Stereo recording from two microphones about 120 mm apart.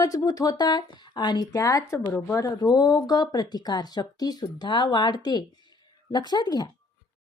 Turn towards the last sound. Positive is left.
turn(degrees=35)  # may be behind; listen again after turning